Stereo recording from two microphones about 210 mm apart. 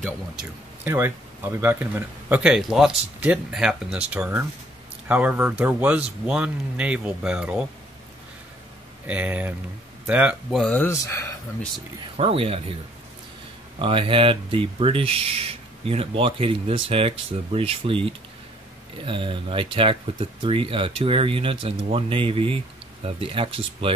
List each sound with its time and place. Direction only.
0.8 s speech: 10° right (ahead or behind)
9.0 s speech: 5° right (ahead or behind); by 11.3 s 15° left (ahead or behind)
12.2 s speech: 25° right (ahead or behind)
13.7 s speech: 25° right (ahead or behind)
19.0 s speech: 25° right (ahead or behind)